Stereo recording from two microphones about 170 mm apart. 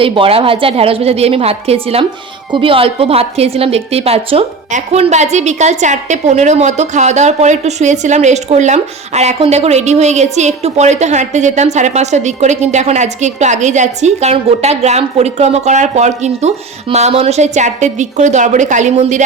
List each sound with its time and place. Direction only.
0.0 s a woman's voice: 35° right (ahead or behind)